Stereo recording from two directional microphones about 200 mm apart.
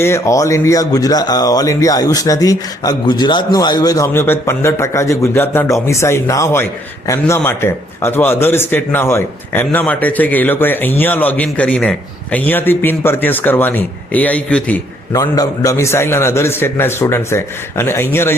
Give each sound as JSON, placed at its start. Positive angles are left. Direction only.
{"t": 0.0, "sound": "a man's voice", "side_deg": 15}